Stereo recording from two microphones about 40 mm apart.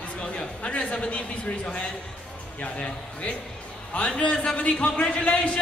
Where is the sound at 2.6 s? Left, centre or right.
Left.